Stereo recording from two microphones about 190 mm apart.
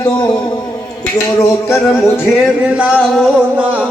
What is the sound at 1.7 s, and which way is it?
Music, 15° left (ahead or behind).